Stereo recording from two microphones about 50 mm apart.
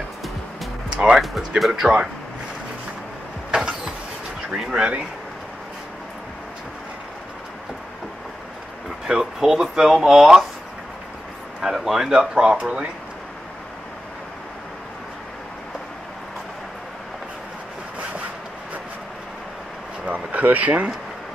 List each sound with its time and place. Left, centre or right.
1.1 s music: centre
1.6 s speech: centre
3.5 s vehicle: centre
4.5 s speech: centre
9.0 s speech: centre
11.6 s speech: centre
20.1 s a sound: right